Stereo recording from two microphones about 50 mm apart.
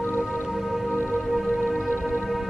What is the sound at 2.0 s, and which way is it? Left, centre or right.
Music, right.